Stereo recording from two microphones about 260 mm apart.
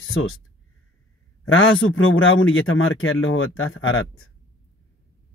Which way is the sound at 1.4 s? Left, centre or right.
Left.